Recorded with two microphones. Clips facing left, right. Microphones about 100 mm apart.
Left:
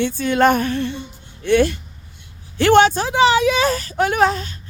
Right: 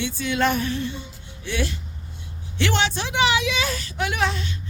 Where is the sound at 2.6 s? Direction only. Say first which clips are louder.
Left 11 dB; 50° left (ahead or behind).